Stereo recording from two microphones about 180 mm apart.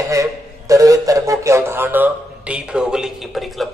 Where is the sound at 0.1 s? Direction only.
20° right (ahead or behind).